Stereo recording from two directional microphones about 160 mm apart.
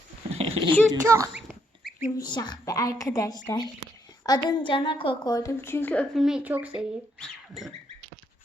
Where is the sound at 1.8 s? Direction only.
Centre (ahead or behind).